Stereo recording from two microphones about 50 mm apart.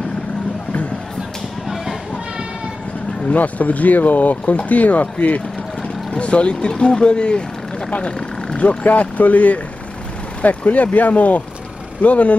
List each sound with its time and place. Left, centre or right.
3.3 s speech: left
8.5 s speech: left